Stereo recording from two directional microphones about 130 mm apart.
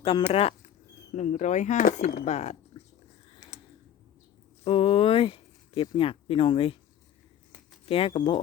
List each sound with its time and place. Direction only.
0.0 s speech: 45° left (ahead or behind)
1.1 s speech: 65° left (ahead or behind)
3.5 s a sound: 60° left (ahead or behind)
4.6 s speech: 45° left (ahead or behind)
7.9 s speech: 45° left (ahead or behind)